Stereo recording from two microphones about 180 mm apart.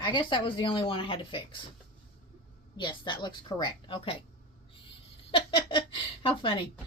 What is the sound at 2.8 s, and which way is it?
Speech, 25° left (ahead or behind).